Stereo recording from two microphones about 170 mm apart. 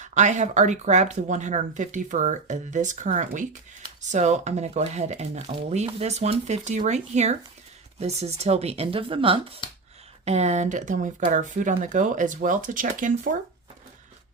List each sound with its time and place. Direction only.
0.0 s speech: 45° right (ahead or behind)